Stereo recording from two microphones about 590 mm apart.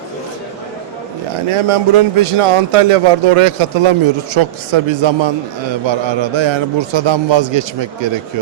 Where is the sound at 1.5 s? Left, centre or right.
Right.